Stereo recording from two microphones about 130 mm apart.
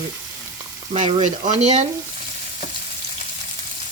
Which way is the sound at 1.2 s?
65° right (ahead or behind).